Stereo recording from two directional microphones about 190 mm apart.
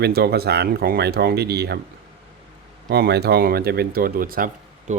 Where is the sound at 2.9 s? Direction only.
60° right (ahead or behind).